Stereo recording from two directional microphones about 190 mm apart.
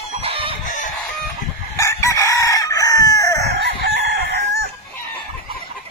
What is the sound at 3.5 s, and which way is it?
Chicken, 60° right (ahead or behind).